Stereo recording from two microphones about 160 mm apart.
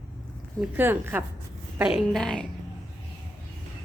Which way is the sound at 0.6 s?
15° right (ahead or behind).